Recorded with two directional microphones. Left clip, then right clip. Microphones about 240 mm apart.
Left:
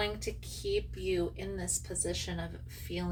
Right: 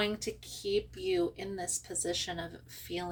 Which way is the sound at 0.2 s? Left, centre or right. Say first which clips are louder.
Even; right.